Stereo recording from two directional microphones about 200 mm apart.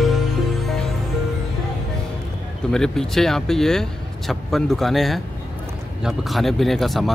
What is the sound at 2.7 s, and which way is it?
Speech, centre (ahead or behind).